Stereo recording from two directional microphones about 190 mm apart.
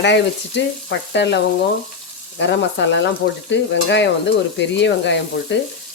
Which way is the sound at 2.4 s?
70° left (ahead or behind).